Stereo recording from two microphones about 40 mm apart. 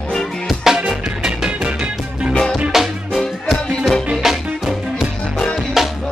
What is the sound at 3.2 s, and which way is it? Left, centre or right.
Music, centre.